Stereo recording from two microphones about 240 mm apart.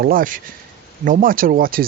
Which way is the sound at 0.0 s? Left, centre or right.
Right.